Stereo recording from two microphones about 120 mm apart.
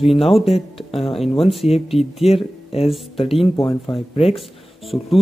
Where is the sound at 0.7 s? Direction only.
55° left (ahead or behind).